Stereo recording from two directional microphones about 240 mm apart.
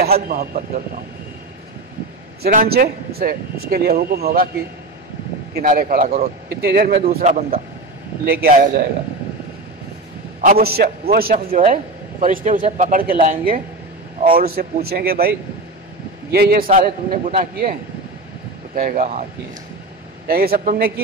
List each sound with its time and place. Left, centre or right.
0.0 s a man's voice: right
2.4 s a man's voice: right
5.5 s a man's voice: right
6.5 s a man's voice: right
10.4 s a man's voice: right
18.8 s a man's voice: right
20.2 s a man's voice: right